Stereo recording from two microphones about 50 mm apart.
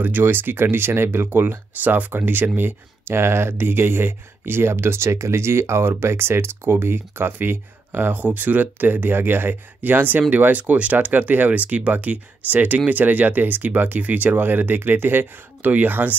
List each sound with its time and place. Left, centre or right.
0.0 s speech: right
15.6 s speech: right